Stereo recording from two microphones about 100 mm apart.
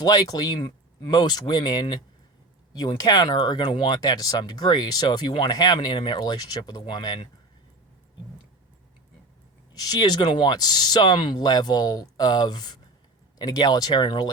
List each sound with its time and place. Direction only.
0.0 s speech: 40° left (ahead or behind)
9.8 s speech: 40° left (ahead or behind)